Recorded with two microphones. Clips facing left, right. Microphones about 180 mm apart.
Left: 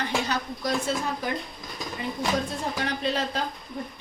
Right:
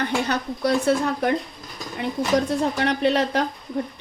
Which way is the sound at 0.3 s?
65° right (ahead or behind).